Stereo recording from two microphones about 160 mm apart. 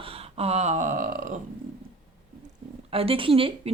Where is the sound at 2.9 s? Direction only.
35° right (ahead or behind).